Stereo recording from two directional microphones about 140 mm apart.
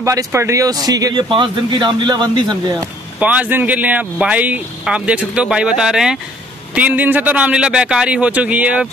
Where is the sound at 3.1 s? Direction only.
10° right (ahead or behind).